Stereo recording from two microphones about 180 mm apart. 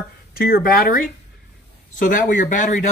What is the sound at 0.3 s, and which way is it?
A man's voice, 55° left (ahead or behind).